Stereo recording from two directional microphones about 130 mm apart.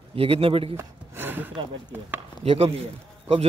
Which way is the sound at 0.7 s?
15° right (ahead or behind).